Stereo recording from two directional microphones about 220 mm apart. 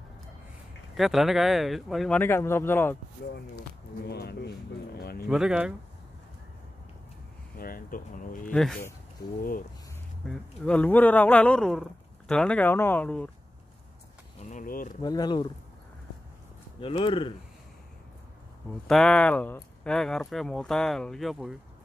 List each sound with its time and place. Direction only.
0.9 s speech: centre (ahead or behind)
4.0 s speech: 45° left (ahead or behind)
5.3 s speech: 5° right (ahead or behind)
7.5 s speech: 40° left (ahead or behind)
8.5 s speech: 5° left (ahead or behind)
9.4 s speech: 40° left (ahead or behind)
10.2 s speech: 5° left (ahead or behind)
14.4 s speech: 35° left (ahead or behind)
15.0 s speech: 20° left (ahead or behind)
16.8 s speech: 25° left (ahead or behind)
18.9 s speech: 5° left (ahead or behind)